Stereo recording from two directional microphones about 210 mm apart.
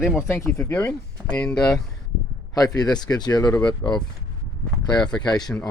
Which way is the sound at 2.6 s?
20° left (ahead or behind).